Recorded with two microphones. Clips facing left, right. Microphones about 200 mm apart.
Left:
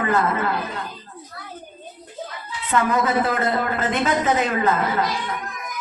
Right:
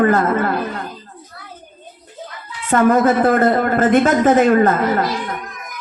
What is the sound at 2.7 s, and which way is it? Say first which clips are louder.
Speech: right 7 dB; 50° right (ahead or behind).